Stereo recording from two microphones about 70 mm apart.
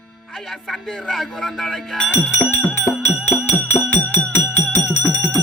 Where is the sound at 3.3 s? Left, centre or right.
Left.